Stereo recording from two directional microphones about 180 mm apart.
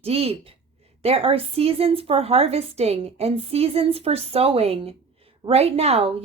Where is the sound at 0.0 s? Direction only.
35° right (ahead or behind).